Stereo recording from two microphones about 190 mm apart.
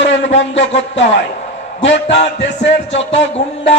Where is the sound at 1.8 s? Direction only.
70° left (ahead or behind).